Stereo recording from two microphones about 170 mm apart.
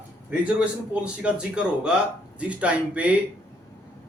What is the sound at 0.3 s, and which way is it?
Speech, 5° right (ahead or behind).